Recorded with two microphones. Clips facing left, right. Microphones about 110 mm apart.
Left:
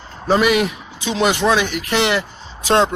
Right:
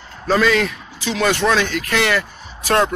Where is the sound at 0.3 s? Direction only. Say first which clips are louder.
Left 1 dB; 15° left (ahead or behind).